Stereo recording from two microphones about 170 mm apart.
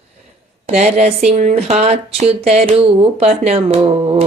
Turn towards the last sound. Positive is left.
turn(degrees=-35)  # may be behind; listen again after turning